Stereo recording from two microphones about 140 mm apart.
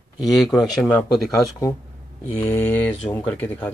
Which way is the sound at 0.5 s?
30° left (ahead or behind).